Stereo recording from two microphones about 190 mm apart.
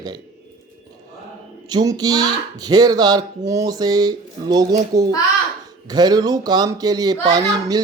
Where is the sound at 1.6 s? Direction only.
20° right (ahead or behind).